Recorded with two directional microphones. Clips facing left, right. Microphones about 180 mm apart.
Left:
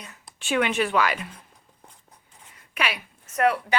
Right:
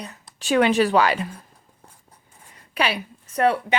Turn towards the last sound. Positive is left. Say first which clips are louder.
# right 2 dB
turn(degrees=-30)  # may be behind; listen again after turning